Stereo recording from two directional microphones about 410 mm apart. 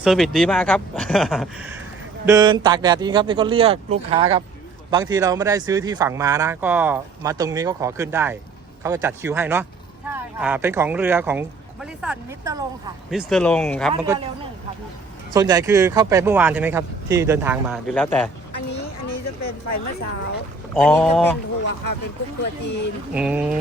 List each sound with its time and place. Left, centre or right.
0.0 s speech: centre
15.3 s speech: centre
18.5 s a sound: left
20.7 s speech: centre
22.6 s speech: left
23.1 s speech: centre